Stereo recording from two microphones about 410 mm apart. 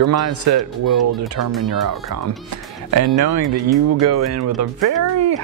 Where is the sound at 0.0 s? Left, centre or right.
Right.